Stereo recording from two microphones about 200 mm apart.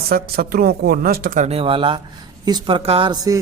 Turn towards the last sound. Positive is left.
turn(degrees=-20)  # may be behind; listen again after turning